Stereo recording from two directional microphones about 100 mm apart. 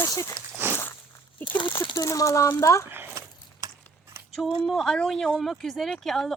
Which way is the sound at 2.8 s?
20° right (ahead or behind).